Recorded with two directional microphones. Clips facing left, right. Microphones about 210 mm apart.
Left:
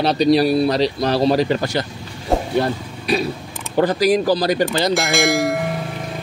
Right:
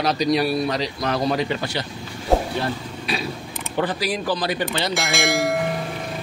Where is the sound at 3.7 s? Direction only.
40° left (ahead or behind).